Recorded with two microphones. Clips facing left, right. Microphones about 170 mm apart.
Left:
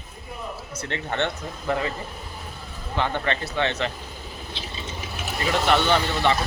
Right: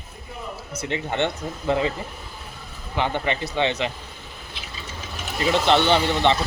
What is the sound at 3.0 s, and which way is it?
Speech, 15° right (ahead or behind).